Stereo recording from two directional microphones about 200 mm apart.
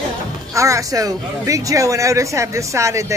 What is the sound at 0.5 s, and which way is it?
Speech, 15° right (ahead or behind).